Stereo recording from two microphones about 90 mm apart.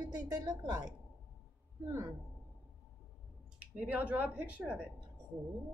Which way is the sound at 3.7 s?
15° right (ahead or behind).